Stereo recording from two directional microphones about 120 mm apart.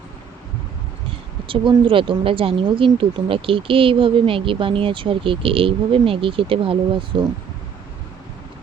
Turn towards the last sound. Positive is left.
turn(degrees=-45)  # may be behind; listen again after turning